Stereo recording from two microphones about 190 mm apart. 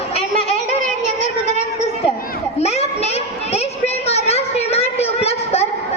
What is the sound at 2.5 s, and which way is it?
Children playing, 35° left (ahead or behind).